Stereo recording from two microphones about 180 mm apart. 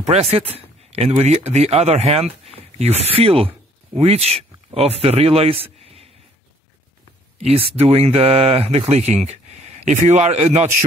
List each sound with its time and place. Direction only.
0.0 s speech: 35° right (ahead or behind)
7.3 s speech: 35° right (ahead or behind)